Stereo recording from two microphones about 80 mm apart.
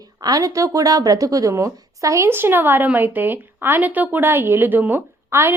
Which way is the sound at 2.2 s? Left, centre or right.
Right.